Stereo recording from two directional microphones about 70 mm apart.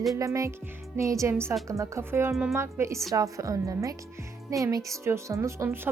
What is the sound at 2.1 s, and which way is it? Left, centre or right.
Speech, right.